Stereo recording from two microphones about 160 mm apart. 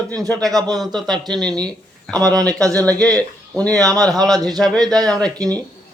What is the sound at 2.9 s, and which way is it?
A man's voice, 5° left (ahead or behind).